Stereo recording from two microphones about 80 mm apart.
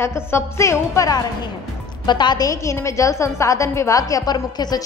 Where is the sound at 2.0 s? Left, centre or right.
Left.